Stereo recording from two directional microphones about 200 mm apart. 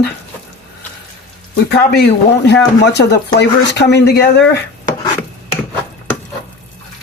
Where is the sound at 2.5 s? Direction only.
60° left (ahead or behind).